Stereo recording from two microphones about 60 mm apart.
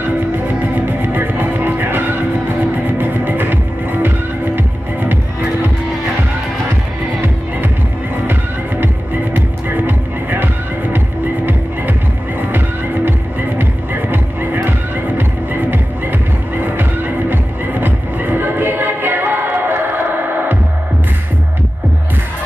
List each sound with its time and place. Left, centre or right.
0.6 s music: right
4.6 s music: right
9.8 s music: right
12.4 s music: right